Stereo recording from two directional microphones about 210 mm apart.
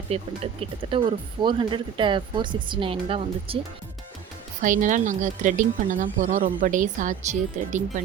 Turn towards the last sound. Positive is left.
turn(degrees=-35)  # may be behind; listen again after turning